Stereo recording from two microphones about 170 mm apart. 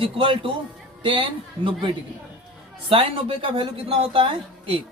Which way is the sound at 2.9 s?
30° right (ahead or behind).